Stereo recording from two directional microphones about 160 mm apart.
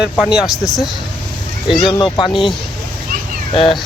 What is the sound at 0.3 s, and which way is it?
Speech, 5° right (ahead or behind).